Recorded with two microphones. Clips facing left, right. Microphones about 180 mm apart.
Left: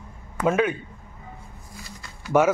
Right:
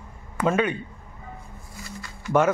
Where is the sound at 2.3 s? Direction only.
5° left (ahead or behind).